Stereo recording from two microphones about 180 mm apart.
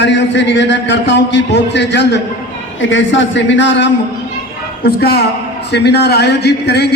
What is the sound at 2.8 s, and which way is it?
A man's voice, 90° left.